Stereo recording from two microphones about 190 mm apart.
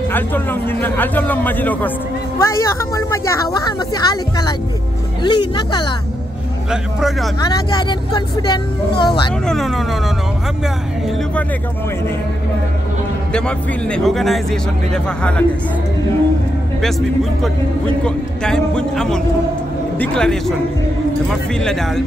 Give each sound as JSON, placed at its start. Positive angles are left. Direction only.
{"t": 0.1, "sound": "speech", "side_deg": 10}
{"t": 6.7, "sound": "a man's voice", "side_deg": 0}
{"t": 7.4, "sound": "speech", "side_deg": 20}
{"t": 9.5, "sound": "a man's voice", "side_deg": 0}
{"t": 13.3, "sound": "a man's voice", "side_deg": 5}
{"t": 16.8, "sound": "a man's voice", "side_deg": 0}